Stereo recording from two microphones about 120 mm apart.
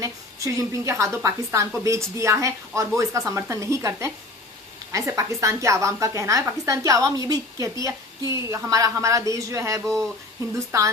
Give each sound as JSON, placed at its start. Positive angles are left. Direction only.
{"t": 0.0, "sound": "a woman's voice", "side_deg": -25}